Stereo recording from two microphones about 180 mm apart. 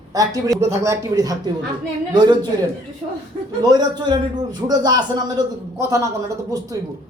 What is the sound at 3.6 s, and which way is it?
A man's voice, 20° right (ahead or behind).